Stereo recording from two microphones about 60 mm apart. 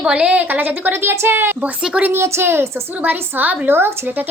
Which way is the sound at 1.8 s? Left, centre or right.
Centre.